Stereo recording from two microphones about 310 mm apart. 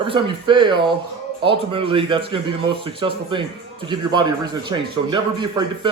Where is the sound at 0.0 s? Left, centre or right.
Centre.